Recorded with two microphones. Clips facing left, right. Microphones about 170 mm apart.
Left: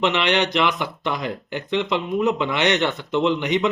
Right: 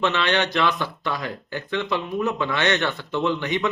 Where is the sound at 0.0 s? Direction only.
20° left (ahead or behind).